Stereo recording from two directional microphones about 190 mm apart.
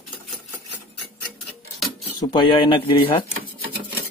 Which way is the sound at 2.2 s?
25° left (ahead or behind).